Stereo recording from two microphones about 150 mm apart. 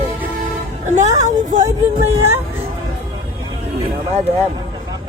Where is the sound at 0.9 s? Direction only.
50° right (ahead or behind).